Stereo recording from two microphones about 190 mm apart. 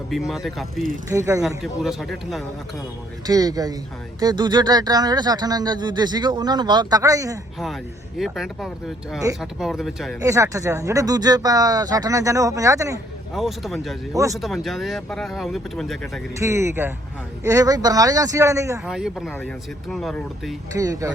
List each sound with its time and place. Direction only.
0.3 s speech: centre (ahead or behind)
1.1 s speech: 15° right (ahead or behind)
1.4 s speech: centre (ahead or behind)
3.2 s speech: 20° right (ahead or behind)
8.2 s speech: centre (ahead or behind)
10.2 s speech: 15° right (ahead or behind)
13.3 s speech: centre (ahead or behind)
14.1 s speech: 15° right (ahead or behind)
14.3 s speech: centre (ahead or behind)
16.4 s speech: 15° right (ahead or behind)
18.9 s speech: 5° right (ahead or behind)
20.7 s speech: 15° right (ahead or behind)